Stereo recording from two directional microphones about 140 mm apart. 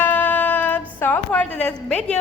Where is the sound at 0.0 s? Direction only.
10° left (ahead or behind).